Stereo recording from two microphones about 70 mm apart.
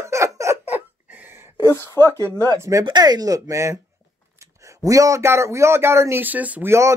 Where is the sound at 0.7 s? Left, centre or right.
Right.